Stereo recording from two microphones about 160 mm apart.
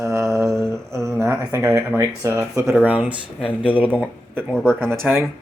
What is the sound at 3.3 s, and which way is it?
Speech, 10° left (ahead or behind).